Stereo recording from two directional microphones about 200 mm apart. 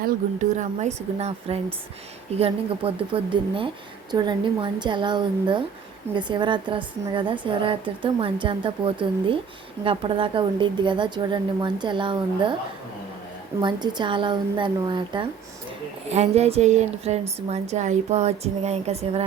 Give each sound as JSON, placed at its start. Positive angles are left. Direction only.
{"t": 0.0, "sound": "a woman's voice", "side_deg": -40}
{"t": 13.6, "sound": "a woman's voice", "side_deg": -20}